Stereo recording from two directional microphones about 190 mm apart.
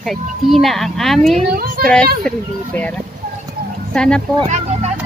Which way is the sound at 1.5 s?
50° right (ahead or behind).